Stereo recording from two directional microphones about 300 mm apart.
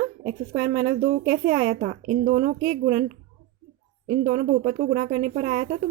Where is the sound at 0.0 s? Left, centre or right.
Right.